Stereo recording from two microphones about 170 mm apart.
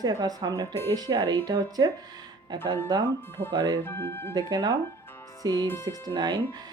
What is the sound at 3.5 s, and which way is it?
Speech, 25° right (ahead or behind).